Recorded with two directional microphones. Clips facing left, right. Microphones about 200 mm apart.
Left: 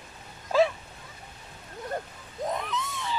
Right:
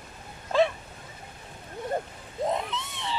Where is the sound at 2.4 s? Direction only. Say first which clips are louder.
Right 2 dB; 25° right (ahead or behind).